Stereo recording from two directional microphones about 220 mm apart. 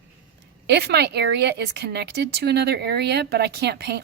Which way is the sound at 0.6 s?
50° right (ahead or behind).